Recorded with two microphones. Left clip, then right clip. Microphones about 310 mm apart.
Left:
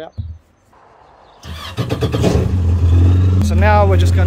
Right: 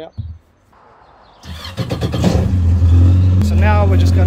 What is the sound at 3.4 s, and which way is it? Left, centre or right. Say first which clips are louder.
Vehicle: left 5 dB; centre.